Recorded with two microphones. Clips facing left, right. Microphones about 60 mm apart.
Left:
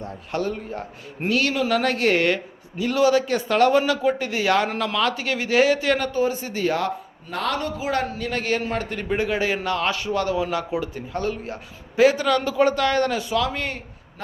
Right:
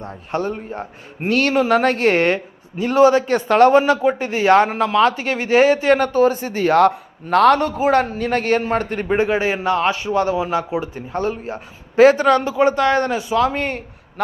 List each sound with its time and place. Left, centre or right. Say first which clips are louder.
0.0 s a man's voice: right 3 dB; right
1.3 s a man's voice: right 6 dB; right
6.0 s speech: right 7 dB; right
6.7 s a man's voice: right 11 dB; right
11.9 s a man's voice: right 6 dB; right
12.5 s a man's voice: right 4 dB; right
13.4 s a man's voice: right 7 dB; right